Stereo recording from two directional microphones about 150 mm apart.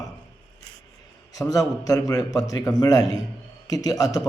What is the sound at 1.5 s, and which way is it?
A man's voice, 25° left (ahead or behind).